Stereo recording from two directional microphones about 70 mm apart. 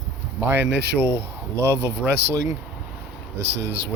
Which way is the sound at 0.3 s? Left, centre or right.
Right.